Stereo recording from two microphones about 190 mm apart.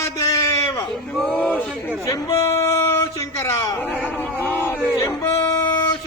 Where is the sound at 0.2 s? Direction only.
15° left (ahead or behind).